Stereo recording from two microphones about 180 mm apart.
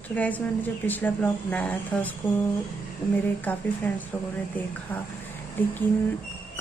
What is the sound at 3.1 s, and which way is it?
A woman's voice, 10° left (ahead or behind).